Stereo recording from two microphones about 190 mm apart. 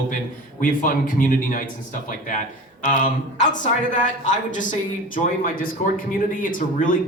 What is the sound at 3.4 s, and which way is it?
Speech, 40° left (ahead or behind).